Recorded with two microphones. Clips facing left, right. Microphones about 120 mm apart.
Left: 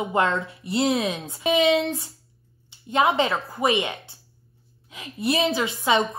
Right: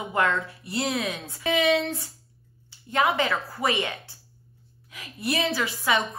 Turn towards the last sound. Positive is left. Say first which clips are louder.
# left 4 dB
turn(degrees=20)  # may be behind; listen again after turning